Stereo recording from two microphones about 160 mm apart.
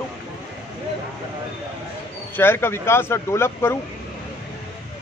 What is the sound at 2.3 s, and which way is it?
Speech, 15° left (ahead or behind).